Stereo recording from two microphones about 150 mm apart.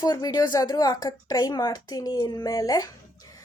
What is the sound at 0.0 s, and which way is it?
A woman's voice, 25° left (ahead or behind).